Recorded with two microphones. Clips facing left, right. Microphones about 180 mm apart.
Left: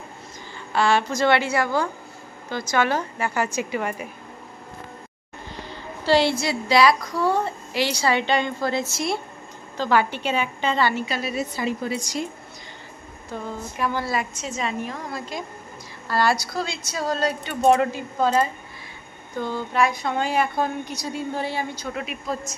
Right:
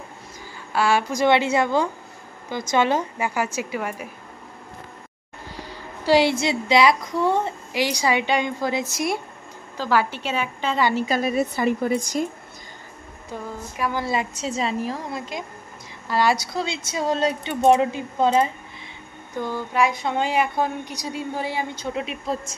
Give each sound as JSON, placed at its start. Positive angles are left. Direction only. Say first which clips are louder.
{"t": 0.7, "sound": "speech", "louder": "even", "side_deg": -10}
{"t": 5.6, "sound": "a sound", "louder": "left 1 dB", "side_deg": -10}
{"t": 6.4, "sound": "speech", "louder": "even", "side_deg": -20}
{"t": 9.8, "sound": "a woman's voice", "louder": "left 1 dB", "side_deg": -5}
{"t": 11.0, "sound": "a woman's voice", "louder": "right 5 dB", "side_deg": -45}
{"t": 13.3, "sound": "speech", "louder": "left 1 dB", "side_deg": -10}
{"t": 14.1, "sound": "a woman's voice", "louder": "right 2 dB", "side_deg": -30}
{"t": 22.3, "sound": "speech", "louder": "right 1 dB", "side_deg": -30}